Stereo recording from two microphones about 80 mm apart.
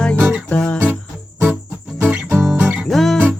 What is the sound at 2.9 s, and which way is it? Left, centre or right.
Music, centre.